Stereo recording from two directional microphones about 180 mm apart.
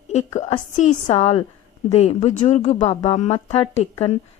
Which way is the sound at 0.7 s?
45° left (ahead or behind).